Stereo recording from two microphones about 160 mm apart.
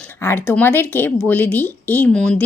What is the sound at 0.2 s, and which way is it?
A woman's voice, 15° left (ahead or behind).